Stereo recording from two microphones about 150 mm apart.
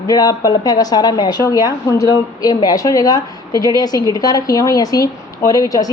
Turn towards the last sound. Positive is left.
turn(degrees=25)  # may be behind; listen again after turning